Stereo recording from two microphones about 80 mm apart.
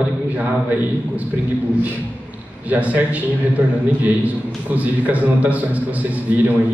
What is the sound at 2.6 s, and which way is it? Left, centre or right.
A man's voice, centre.